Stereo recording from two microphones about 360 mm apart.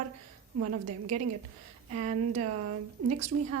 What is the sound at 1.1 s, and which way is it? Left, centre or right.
A woman's voice, right.